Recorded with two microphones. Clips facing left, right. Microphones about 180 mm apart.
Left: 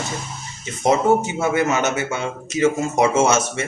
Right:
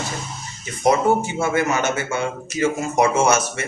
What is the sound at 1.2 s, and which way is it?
A man's voice, 20° left (ahead or behind).